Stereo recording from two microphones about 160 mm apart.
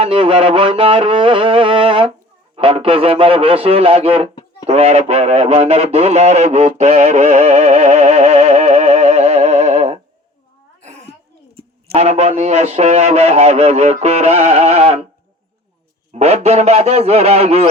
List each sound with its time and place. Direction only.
0.0 s music: 35° right (ahead or behind)
4.6 s speech: 40° right (ahead or behind)
10.8 s sneeze: 45° right (ahead or behind)
11.5 s a man's voice: 40° right (ahead or behind)
16.1 s music: 40° right (ahead or behind)